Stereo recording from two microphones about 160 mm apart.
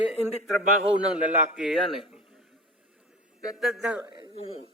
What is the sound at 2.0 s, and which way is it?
Speech, 35° left (ahead or behind).